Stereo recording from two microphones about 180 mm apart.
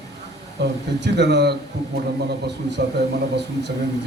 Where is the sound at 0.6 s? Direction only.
70° right (ahead or behind).